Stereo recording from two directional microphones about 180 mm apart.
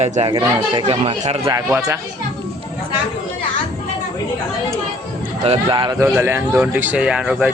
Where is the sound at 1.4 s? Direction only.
15° right (ahead or behind).